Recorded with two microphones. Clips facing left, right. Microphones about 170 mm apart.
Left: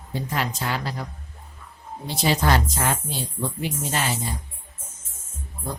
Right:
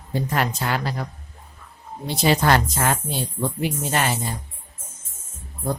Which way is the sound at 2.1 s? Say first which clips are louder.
Right 3 dB; 65° right (ahead or behind).